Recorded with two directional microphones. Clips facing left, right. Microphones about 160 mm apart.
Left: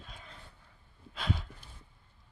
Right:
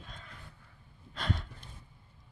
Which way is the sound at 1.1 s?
5° left (ahead or behind).